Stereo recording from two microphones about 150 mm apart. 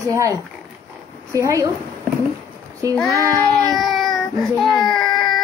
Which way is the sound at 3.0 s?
20° right (ahead or behind).